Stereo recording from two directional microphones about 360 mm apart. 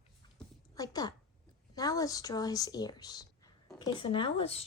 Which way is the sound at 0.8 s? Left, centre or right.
Centre.